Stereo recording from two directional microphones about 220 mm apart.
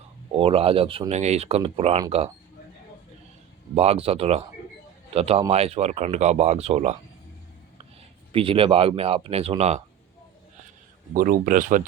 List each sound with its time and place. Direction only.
0.3 s speech: 25° right (ahead or behind)
3.8 s speech: 25° right (ahead or behind)
8.3 s speech: 25° right (ahead or behind)
11.1 s speech: 40° right (ahead or behind)